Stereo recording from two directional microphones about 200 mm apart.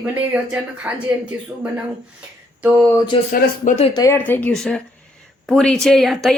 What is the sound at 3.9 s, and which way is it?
Speech, 15° left (ahead or behind).